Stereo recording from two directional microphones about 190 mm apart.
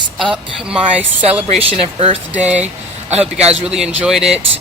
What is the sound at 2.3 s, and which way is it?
Speech, 5° right (ahead or behind).